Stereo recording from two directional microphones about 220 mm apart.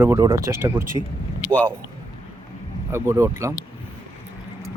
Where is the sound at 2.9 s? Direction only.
10° right (ahead or behind).